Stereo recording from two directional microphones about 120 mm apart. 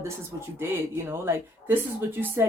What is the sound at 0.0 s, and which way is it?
A woman's voice, 20° right (ahead or behind).